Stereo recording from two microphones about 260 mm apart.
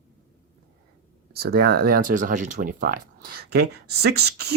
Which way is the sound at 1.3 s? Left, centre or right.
Right.